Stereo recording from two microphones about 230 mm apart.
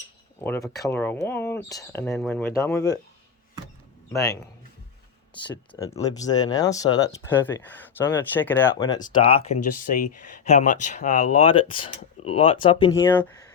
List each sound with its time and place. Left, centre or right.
0.4 s speech: centre
4.1 s speech: centre
9.6 s speech: left; by 13.3 s centre